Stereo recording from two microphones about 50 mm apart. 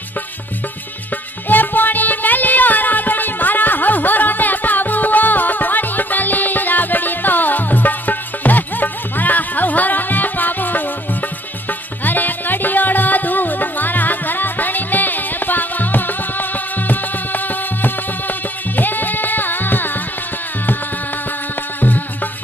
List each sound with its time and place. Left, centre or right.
1.5 s music: left
12.0 s music: left
18.8 s music: left